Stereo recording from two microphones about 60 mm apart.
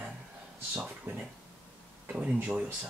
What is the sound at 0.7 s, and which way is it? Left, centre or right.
Speech, right.